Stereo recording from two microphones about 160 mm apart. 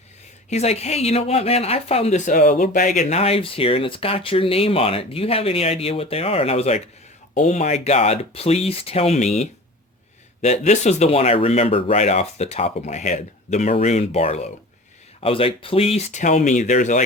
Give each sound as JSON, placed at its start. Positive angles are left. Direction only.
{"t": 0.5, "sound": "speech", "side_deg": 40}
{"t": 3.0, "sound": "speech", "side_deg": 40}